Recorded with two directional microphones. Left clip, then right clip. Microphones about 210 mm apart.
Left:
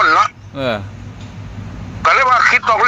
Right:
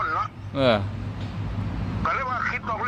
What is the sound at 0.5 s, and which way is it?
Speech, 10° left (ahead or behind).